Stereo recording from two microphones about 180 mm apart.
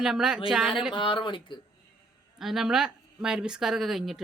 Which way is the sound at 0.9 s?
25° left (ahead or behind).